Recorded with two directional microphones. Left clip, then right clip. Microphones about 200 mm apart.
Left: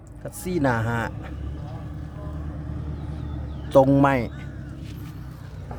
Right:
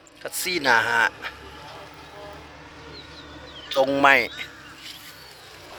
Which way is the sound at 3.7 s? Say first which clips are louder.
Even; 20° left (ahead or behind).